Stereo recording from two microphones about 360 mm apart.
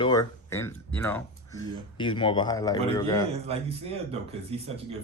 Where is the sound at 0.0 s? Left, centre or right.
Centre.